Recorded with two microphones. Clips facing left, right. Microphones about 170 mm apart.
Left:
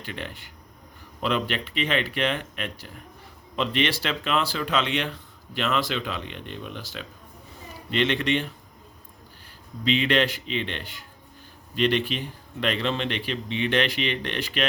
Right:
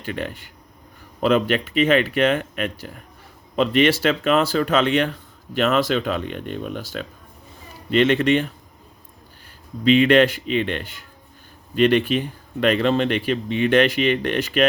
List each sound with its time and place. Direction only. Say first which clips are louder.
0.0 s a man's voice: right 7 dB; 45° right (ahead or behind)
9.8 s a man's voice: right 8 dB; 50° right (ahead or behind)